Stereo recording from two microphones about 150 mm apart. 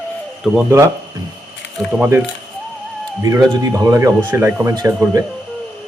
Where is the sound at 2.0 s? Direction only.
15° right (ahead or behind).